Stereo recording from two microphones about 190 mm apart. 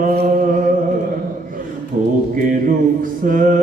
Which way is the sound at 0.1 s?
55° right (ahead or behind).